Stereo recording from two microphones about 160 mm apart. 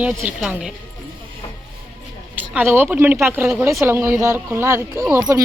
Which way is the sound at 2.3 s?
10° right (ahead or behind).